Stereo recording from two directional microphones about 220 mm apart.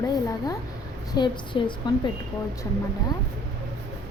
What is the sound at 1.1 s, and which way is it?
A woman's voice, 20° left (ahead or behind).